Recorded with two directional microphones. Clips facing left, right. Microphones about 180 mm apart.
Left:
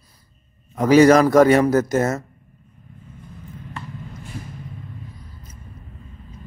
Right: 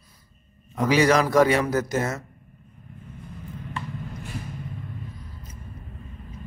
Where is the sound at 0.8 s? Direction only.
45° left (ahead or behind).